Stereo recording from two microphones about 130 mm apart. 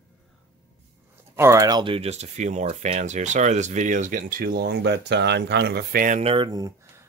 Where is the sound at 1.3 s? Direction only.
25° right (ahead or behind).